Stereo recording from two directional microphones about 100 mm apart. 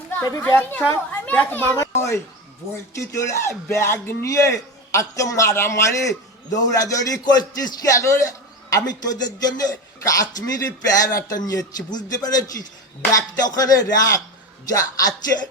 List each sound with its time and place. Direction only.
0.2 s a man's voice: 35° left (ahead or behind)
0.4 s a child's voice: 20° left (ahead or behind)
1.7 s a child's voice: 30° left (ahead or behind)